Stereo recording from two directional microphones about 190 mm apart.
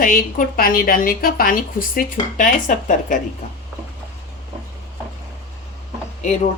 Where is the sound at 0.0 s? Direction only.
50° left (ahead or behind).